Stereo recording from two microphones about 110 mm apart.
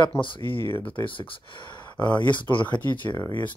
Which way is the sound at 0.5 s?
55° left (ahead or behind).